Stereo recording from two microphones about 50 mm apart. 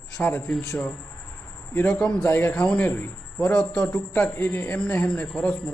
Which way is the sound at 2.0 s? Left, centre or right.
Left.